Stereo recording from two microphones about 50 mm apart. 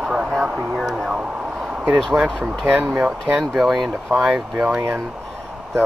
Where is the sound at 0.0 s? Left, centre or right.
Centre.